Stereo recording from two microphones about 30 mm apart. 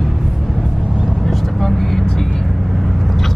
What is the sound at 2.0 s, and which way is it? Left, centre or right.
Vehicle, left.